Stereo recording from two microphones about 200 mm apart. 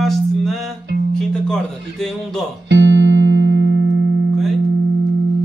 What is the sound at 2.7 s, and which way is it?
Music, 65° right (ahead or behind).